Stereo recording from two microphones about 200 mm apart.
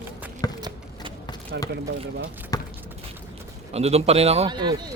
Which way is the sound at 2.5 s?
20° left (ahead or behind).